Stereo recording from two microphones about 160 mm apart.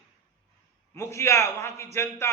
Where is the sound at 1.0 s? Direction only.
15° left (ahead or behind).